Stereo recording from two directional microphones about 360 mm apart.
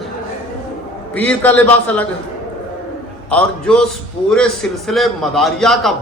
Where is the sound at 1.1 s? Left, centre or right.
Centre.